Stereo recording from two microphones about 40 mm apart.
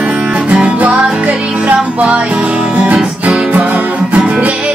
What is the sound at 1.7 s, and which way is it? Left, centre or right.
Music, right.